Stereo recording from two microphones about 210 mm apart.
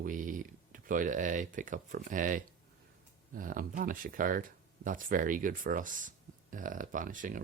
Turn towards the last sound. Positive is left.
turn(degrees=-40)  # may be behind; listen again after turning